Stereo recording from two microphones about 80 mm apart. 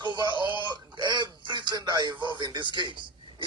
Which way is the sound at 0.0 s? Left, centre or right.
Right.